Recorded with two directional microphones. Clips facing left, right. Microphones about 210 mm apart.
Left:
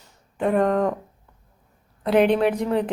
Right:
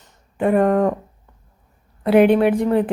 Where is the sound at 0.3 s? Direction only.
5° right (ahead or behind).